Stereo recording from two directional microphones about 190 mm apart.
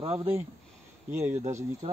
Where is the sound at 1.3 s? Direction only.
35° right (ahead or behind).